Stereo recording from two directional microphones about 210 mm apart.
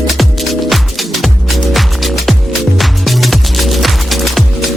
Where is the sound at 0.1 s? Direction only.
Centre (ahead or behind).